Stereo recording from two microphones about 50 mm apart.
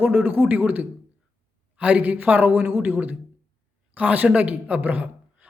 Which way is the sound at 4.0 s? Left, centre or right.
Right.